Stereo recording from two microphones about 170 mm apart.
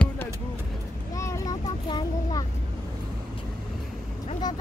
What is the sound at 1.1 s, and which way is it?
Vehicle, 20° left (ahead or behind).